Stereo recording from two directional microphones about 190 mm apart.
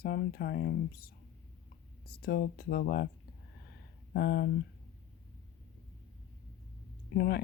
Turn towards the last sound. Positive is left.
turn(degrees=55)  # may be behind; listen again after turning